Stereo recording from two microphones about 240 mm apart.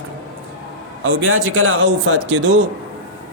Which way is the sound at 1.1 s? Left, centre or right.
Right.